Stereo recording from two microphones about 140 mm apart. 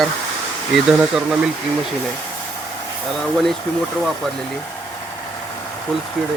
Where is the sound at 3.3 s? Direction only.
Centre (ahead or behind).